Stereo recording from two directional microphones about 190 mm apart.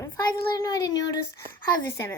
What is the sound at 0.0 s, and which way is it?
A child's voice, 20° left (ahead or behind).